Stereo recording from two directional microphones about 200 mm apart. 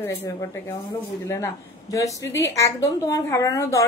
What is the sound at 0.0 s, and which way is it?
A woman's voice, 10° left (ahead or behind).